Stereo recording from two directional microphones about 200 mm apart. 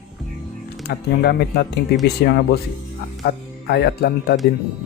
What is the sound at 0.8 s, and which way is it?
Speech, 55° left (ahead or behind).